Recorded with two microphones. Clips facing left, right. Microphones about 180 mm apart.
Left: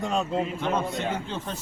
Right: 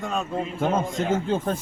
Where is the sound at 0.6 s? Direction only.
45° right (ahead or behind).